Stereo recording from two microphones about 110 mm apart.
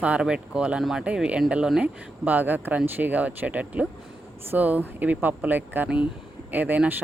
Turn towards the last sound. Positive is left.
turn(degrees=-15)  # may be behind; listen again after turning